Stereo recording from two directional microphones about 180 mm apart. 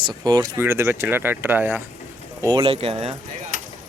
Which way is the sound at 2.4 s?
25° right (ahead or behind).